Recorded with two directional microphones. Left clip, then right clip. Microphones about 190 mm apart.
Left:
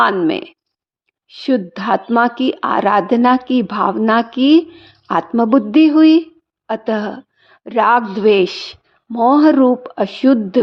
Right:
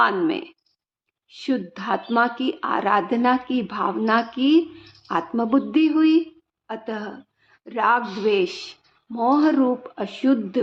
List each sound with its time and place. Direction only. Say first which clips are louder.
0.0 s a woman's voice: left 6 dB; 40° left (ahead or behind)